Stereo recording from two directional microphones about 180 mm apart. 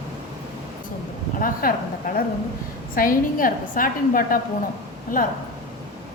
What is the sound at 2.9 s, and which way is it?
A woman's voice, 50° left (ahead or behind).